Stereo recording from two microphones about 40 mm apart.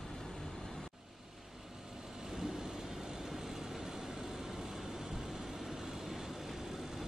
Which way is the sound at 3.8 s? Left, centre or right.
Centre.